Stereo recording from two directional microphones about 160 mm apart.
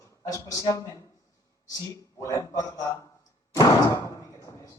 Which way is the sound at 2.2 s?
20° left (ahead or behind).